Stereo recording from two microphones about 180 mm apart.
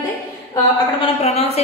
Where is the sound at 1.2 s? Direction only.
35° left (ahead or behind).